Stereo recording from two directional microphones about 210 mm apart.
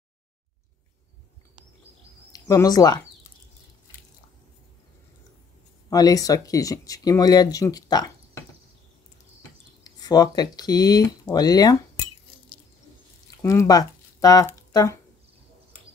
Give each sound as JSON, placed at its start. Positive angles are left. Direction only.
{"t": 2.3, "sound": "speech", "side_deg": 15}
{"t": 5.9, "sound": "speech", "side_deg": 15}
{"t": 9.8, "sound": "speech", "side_deg": 20}
{"t": 13.4, "sound": "speech", "side_deg": 15}